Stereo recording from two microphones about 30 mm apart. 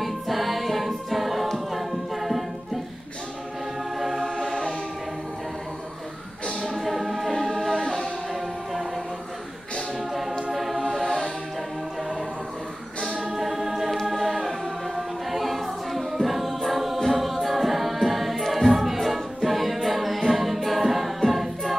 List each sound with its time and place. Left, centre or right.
0.0 s choir: centre
1.7 s music: centre
4.0 s music: centre
4.4 s music: centre
6.6 s music: centre
7.3 s music: centre
10.5 s choir: centre
13.2 s a capella: centre
15.0 s choir: centre
16.1 s a capella: centre
18.4 s choir: centre
18.7 s music: centre
20.2 s a capella: centre